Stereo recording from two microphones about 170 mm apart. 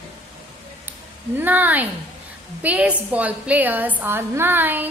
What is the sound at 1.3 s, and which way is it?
A woman's voice, 10° right (ahead or behind).